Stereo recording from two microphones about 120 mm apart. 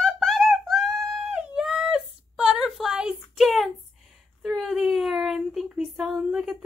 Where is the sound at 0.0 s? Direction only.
Centre (ahead or behind).